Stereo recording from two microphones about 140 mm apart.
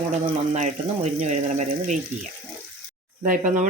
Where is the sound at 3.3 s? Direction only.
75° right (ahead or behind).